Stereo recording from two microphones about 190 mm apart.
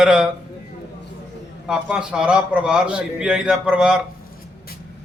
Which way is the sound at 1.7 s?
5° right (ahead or behind).